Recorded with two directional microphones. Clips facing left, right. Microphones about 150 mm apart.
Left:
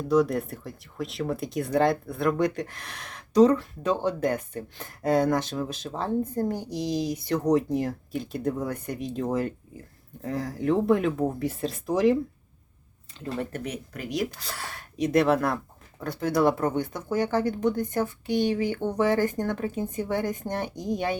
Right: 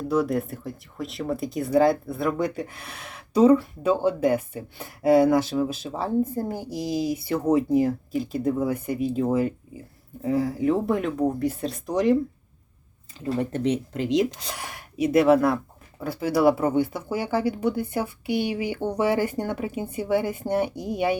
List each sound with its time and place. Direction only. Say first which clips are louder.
0.1 s speech: left 1 dB; centre (ahead or behind)
13.4 s speech: right 8 dB; 25° right (ahead or behind)